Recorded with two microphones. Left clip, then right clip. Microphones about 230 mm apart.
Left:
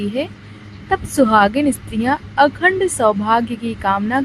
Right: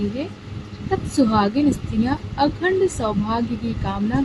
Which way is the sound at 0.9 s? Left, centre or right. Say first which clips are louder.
Left 6 dB; left.